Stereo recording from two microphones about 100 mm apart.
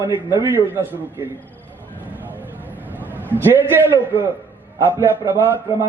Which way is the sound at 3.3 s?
20° right (ahead or behind).